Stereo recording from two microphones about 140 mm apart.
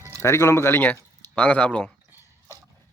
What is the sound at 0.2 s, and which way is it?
Speech, 20° left (ahead or behind).